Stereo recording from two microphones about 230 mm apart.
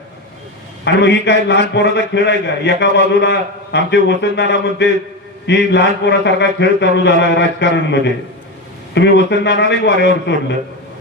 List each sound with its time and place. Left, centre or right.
0.9 s a man's voice: left